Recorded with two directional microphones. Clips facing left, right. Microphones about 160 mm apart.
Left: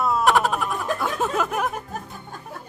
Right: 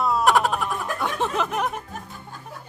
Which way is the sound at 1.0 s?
5° left (ahead or behind).